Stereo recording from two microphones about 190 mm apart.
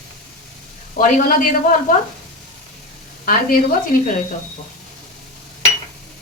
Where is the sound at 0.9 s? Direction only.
45° left (ahead or behind).